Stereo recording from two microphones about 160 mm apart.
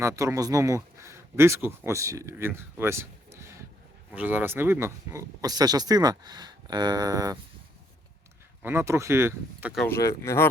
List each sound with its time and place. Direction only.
0.0 s speech: 15° right (ahead or behind)
8.6 s speech: 15° right (ahead or behind)
9.9 s speech: 20° left (ahead or behind)